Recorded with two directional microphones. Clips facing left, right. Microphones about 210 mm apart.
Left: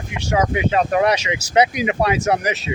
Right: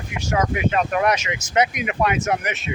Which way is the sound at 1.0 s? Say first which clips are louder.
Left 3 dB; 30° left (ahead or behind).